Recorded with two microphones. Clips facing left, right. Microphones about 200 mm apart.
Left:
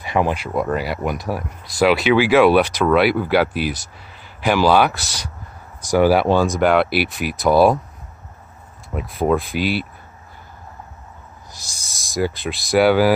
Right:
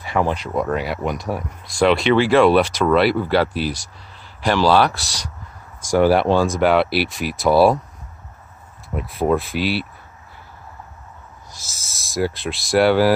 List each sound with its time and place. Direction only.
0.0 s speech: 15° left (ahead or behind); by 7.8 s centre (ahead or behind)
8.9 s speech: centre (ahead or behind)
11.5 s speech: centre (ahead or behind)